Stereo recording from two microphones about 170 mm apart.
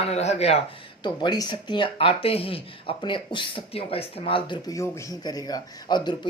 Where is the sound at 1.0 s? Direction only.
25° left (ahead or behind).